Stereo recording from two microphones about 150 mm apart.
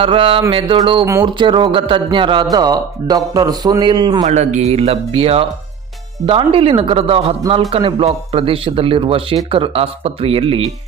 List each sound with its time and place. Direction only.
0.0 s a man's voice: 35° right (ahead or behind)
4.2 s a man's voice: 50° right (ahead or behind)